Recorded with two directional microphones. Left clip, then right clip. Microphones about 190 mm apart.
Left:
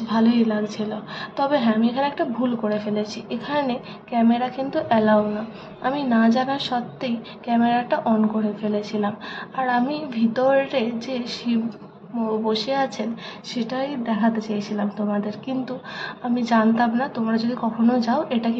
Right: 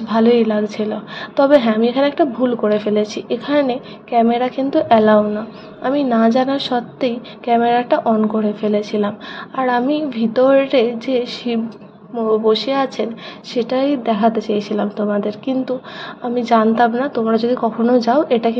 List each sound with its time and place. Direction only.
0.1 s a woman's voice: 30° right (ahead or behind)